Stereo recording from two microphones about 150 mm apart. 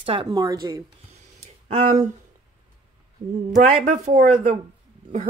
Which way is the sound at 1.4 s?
50° right (ahead or behind).